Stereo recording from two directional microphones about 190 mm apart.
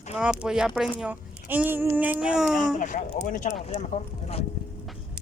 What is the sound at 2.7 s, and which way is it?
Speech, 40° left (ahead or behind).